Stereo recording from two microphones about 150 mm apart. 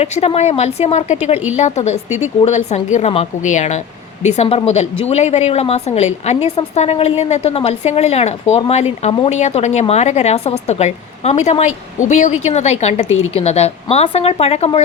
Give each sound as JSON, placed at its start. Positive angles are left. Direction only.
{"t": 0.0, "sound": "a woman's voice", "side_deg": 45}